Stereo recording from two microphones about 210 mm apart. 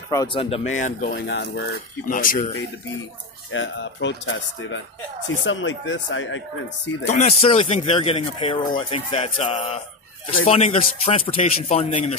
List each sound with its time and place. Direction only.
0.1 s speech: 20° left (ahead or behind)
1.0 s speech: 55° left (ahead or behind)
3.5 s speech: 60° left (ahead or behind)
7.1 s speech: 35° left (ahead or behind)